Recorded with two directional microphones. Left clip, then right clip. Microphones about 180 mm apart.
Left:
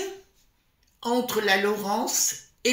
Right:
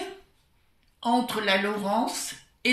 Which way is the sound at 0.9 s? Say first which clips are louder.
Even; 50° left (ahead or behind).